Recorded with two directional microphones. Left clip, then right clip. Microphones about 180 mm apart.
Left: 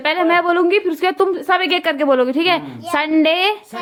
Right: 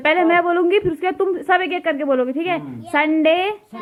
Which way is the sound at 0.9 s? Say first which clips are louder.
Left 4 dB; 35° left (ahead or behind).